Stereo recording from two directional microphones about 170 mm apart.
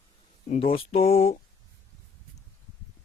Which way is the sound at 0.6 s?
35° left (ahead or behind).